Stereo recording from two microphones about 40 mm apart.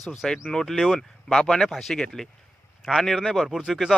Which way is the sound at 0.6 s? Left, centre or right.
Centre.